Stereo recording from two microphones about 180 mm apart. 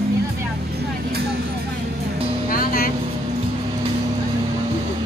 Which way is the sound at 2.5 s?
55° left (ahead or behind).